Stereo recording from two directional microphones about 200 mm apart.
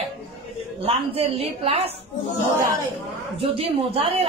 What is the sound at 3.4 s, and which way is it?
Speech, 30° right (ahead or behind).